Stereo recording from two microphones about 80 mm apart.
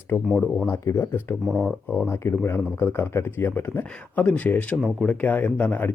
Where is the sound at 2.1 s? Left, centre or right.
Left.